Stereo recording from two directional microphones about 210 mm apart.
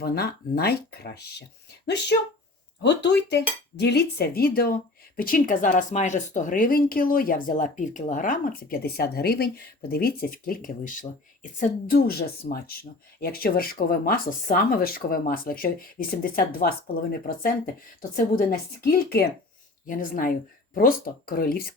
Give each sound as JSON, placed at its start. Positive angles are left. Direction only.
{"t": 0.0, "sound": "dishes", "side_deg": 50}
{"t": 2.8, "sound": "dishes", "side_deg": 55}